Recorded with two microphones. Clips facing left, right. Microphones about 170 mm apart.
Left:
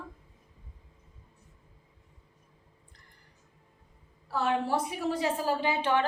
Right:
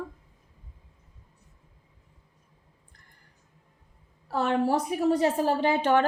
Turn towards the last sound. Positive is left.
turn(degrees=-45)  # may be behind; listen again after turning